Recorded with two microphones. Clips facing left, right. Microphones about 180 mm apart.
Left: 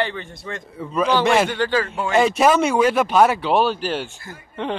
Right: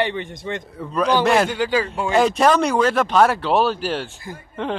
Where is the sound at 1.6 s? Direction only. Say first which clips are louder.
Even; 10° right (ahead or behind).